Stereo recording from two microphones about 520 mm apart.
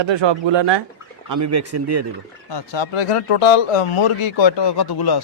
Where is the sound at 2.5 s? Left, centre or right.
Left.